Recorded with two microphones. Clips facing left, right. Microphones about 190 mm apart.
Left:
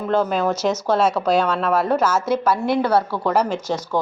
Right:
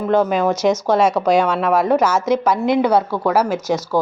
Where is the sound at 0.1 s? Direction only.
10° right (ahead or behind).